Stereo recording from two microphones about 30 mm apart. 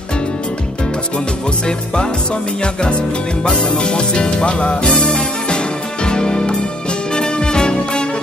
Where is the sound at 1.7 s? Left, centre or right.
Left.